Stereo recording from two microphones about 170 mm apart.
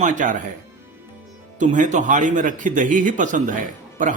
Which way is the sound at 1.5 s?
45° right (ahead or behind).